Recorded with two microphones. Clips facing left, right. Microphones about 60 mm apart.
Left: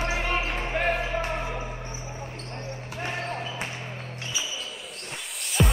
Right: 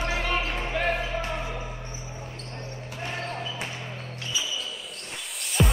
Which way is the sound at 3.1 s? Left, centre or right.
Centre.